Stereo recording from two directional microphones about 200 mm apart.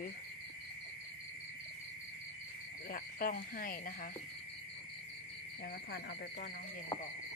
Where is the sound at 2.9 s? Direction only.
45° left (ahead or behind).